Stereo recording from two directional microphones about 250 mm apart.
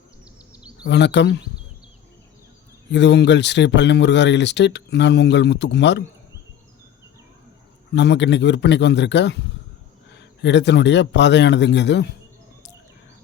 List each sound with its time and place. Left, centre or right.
0.9 s speech: left
2.9 s speech: left
7.9 s speech: left